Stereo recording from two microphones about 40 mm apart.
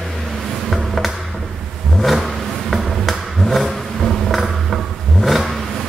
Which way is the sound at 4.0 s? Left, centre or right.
Centre.